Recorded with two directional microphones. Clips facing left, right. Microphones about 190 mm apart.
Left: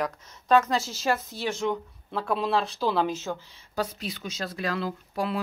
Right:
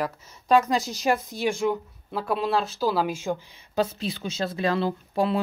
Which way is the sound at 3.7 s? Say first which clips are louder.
Right 5 dB; 25° right (ahead or behind).